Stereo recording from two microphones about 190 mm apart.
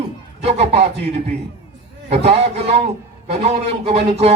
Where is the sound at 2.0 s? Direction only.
35° right (ahead or behind).